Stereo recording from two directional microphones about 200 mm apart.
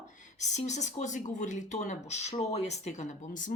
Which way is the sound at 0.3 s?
35° left (ahead or behind).